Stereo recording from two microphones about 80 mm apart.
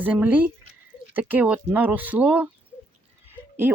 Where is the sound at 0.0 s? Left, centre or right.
Right.